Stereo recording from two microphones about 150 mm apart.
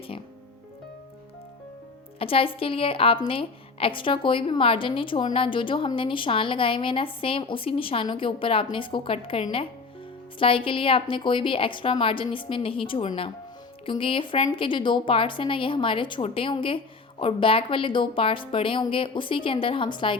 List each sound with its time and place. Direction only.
2.1 s a woman's voice: 40° left (ahead or behind)